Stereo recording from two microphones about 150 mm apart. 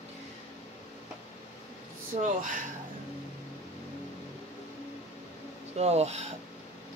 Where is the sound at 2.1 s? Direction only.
55° right (ahead or behind).